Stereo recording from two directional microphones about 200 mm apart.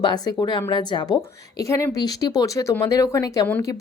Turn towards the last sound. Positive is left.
turn(degrees=15)  # may be behind; listen again after turning